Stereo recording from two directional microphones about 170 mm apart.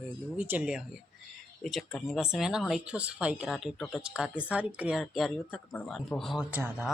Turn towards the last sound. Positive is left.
turn(degrees=-10)  # may be behind; listen again after turning